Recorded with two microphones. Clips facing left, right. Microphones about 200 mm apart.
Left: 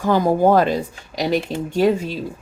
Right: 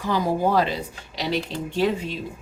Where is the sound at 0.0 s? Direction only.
50° left (ahead or behind).